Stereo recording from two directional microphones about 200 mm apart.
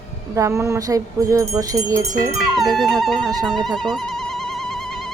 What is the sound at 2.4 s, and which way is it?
Music, centre (ahead or behind).